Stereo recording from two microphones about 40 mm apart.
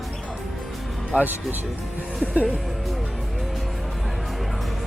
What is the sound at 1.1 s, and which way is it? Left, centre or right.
Speech, right.